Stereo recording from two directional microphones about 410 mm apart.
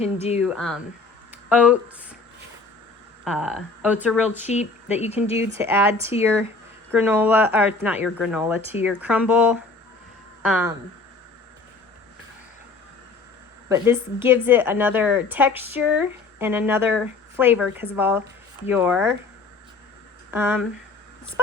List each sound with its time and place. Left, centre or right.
0.0 s speech: centre
0.3 s speech: centre
3.2 s speech: centre
4.4 s speech: centre
5.4 s speech: centre
13.7 s speech: centre
20.3 s speech: centre